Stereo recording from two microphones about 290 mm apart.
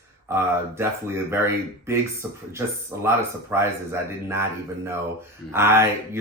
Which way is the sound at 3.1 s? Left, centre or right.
Centre.